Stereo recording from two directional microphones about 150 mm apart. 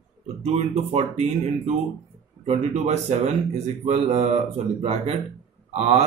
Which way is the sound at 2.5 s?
45° right (ahead or behind).